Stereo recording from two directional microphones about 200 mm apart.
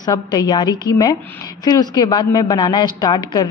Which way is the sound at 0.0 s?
20° left (ahead or behind).